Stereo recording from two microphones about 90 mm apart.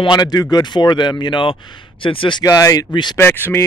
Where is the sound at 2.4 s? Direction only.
40° left (ahead or behind).